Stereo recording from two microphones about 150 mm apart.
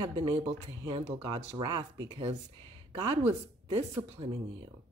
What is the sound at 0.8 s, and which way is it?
Speech, 30° right (ahead or behind).